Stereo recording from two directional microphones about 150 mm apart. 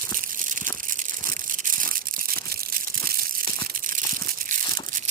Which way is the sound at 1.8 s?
70° right (ahead or behind).